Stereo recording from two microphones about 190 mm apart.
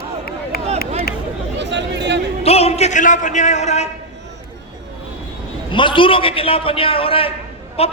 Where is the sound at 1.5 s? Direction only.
65° right (ahead or behind).